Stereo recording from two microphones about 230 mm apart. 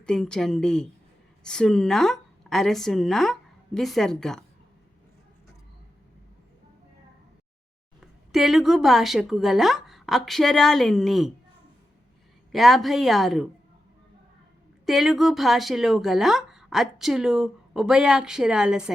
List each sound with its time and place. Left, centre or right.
0.0 s speech: centre
8.0 s a woman's voice: centre
12.5 s speech: centre
14.8 s speech: centre